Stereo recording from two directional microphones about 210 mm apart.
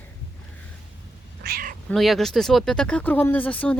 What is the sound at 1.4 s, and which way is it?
Speech, 45° right (ahead or behind).